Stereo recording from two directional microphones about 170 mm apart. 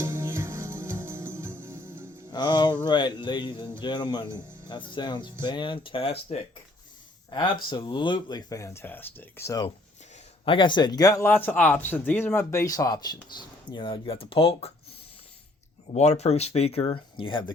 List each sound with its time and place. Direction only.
0.0 s music: 15° right (ahead or behind)
2.3 s a sound: 25° left (ahead or behind)
2.8 s speech: 25° left (ahead or behind)
10.4 s speech: 30° left (ahead or behind)
15.9 s speech: 40° left (ahead or behind)